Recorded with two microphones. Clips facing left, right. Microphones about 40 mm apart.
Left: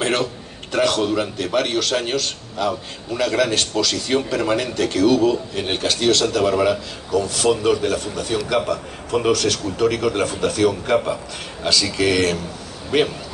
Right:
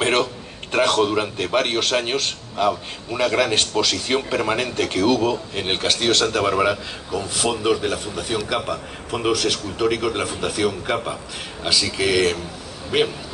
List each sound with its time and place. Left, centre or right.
0.0 s a man's voice: right
6.7 s speech: centre